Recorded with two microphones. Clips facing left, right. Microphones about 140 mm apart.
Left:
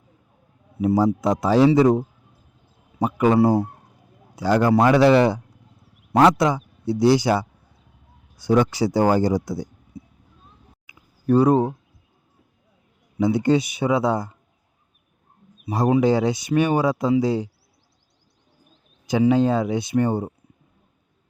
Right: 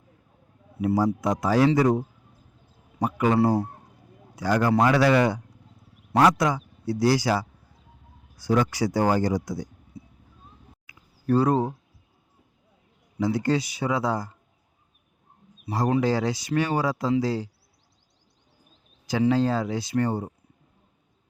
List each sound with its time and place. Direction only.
0.8 s speech: 25° left (ahead or behind)
4.4 s speech: 30° left (ahead or behind)
10.9 s a sound: 20° left (ahead or behind)
11.3 s speech: 20° left (ahead or behind)
13.1 s speech: 20° left (ahead or behind)
15.7 s speech: 20° left (ahead or behind)
19.2 s speech: 20° left (ahead or behind)